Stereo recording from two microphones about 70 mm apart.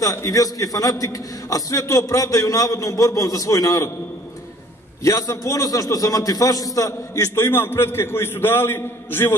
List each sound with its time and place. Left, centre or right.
0.0 s a man's voice: left
5.0 s a man's voice: left